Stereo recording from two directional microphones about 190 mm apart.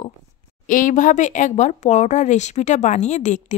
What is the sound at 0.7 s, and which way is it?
Speech, 45° left (ahead or behind).